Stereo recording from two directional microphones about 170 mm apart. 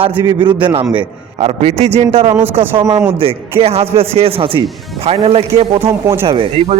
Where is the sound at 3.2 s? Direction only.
35° right (ahead or behind).